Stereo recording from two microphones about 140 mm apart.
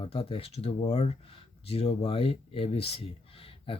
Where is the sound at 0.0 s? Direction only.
40° left (ahead or behind).